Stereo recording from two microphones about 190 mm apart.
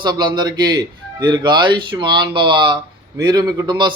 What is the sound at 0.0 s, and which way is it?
A man's voice, 20° right (ahead or behind).